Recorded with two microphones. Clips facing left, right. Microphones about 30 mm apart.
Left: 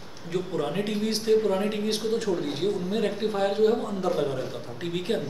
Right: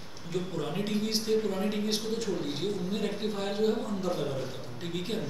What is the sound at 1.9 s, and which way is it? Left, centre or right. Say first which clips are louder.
A man's voice: left 5 dB; centre.